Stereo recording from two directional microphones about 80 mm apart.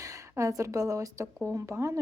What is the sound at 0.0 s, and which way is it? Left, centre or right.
A woman's voice, right.